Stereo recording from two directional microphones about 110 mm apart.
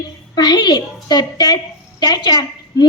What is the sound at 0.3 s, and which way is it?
A woman's voice, 40° left (ahead or behind).